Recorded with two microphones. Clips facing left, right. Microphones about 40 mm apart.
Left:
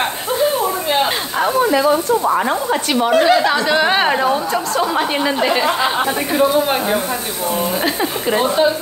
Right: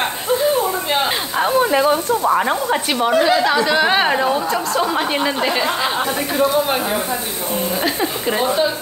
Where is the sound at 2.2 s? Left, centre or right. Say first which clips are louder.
Even; centre.